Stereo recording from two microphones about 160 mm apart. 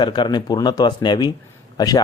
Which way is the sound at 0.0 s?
25° left (ahead or behind).